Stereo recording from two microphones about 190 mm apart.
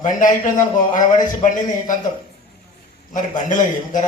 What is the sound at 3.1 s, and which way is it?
Speech, 45° left (ahead or behind).